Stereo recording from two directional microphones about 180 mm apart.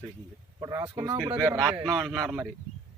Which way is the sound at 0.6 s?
20° right (ahead or behind).